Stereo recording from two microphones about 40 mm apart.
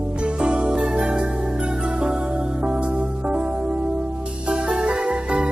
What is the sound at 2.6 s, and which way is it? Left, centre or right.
Music, right.